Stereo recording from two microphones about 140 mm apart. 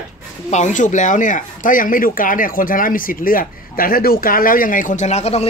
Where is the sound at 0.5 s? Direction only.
60° left (ahead or behind).